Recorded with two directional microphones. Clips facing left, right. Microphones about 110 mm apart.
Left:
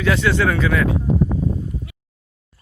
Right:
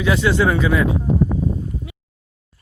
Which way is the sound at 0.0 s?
15° right (ahead or behind).